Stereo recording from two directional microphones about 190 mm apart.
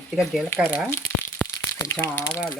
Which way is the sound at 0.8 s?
15° left (ahead or behind).